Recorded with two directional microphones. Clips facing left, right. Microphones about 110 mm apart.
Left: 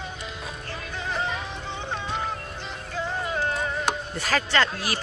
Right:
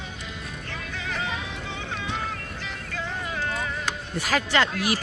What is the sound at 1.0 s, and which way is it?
Music, 30° left (ahead or behind).